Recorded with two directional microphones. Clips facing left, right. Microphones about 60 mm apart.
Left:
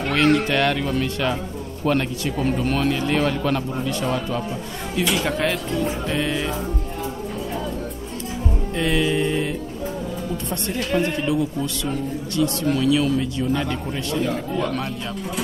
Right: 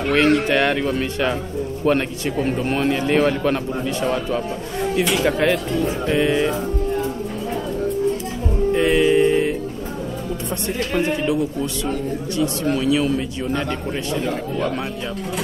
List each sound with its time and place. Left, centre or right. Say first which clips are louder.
0.1 s speech: right 2 dB; centre
0.5 s speech: right 2 dB; right
5.2 s speech: right 4 dB; centre
8.7 s music: right 5 dB; centre
10.9 s speech: right 1 dB; right